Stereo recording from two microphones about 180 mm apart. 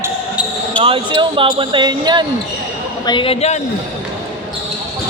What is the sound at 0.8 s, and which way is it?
Speech, 30° right (ahead or behind).